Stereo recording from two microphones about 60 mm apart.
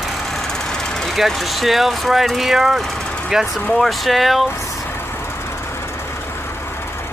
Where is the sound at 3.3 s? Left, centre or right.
Centre.